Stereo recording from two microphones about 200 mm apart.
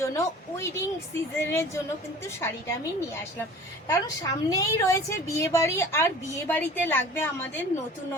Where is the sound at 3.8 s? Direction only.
15° left (ahead or behind).